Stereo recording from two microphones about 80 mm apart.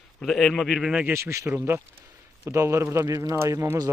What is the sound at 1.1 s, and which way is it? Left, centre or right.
Speech, right.